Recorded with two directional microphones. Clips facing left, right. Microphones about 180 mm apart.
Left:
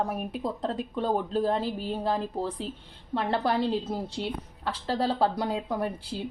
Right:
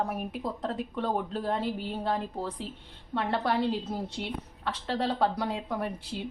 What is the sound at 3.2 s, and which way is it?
A woman's voice, 30° left (ahead or behind).